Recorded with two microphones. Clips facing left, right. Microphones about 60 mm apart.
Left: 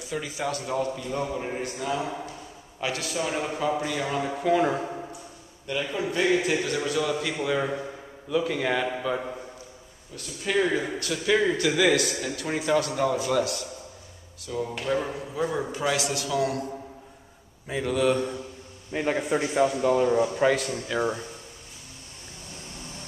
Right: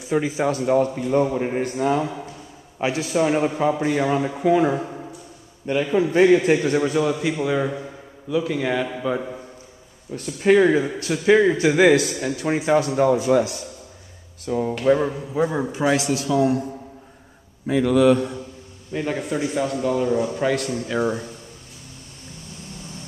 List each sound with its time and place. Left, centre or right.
0.1 s a man's voice: right
2.8 s a man's voice: right
4.4 s a man's voice: centre
5.7 s a man's voice: right
7.1 s a man's voice: centre
10.1 s a man's voice: right
14.4 s speech: right
15.3 s a man's voice: right
18.0 s a man's voice: centre
18.9 s a man's voice: centre
20.8 s a man's voice: centre